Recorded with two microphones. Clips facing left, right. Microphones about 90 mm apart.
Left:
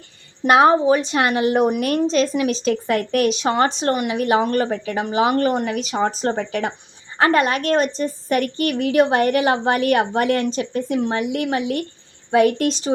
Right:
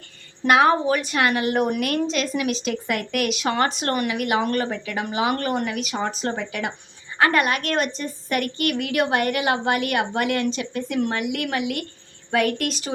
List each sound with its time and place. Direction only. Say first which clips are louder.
0.4 s a woman's voice: left 4 dB; 30° left (ahead or behind)